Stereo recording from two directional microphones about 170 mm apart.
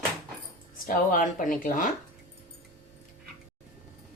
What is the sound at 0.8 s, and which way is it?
A woman's voice, 50° left (ahead or behind).